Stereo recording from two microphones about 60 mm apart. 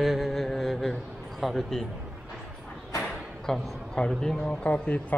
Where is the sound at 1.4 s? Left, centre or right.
Centre.